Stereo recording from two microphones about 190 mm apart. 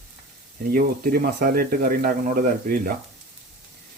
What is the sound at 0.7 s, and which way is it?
Speech, 50° right (ahead or behind).